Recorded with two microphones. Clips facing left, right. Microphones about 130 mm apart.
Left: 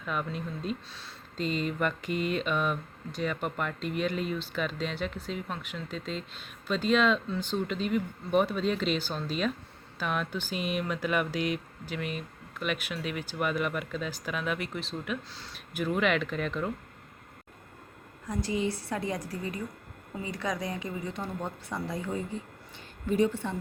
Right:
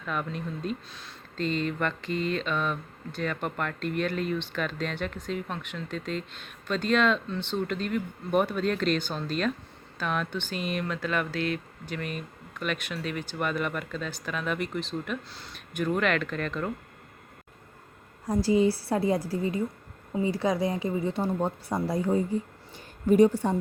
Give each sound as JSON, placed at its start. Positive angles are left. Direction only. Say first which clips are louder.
{"t": 0.0, "sound": "speech", "louder": "right 1 dB", "side_deg": 5}
{"t": 1.4, "sound": "a sound", "louder": "right 1 dB", "side_deg": 5}
{"t": 3.2, "sound": "speech", "louder": "right 1 dB", "side_deg": 5}
{"t": 18.3, "sound": "speech", "louder": "right 7 dB", "side_deg": -35}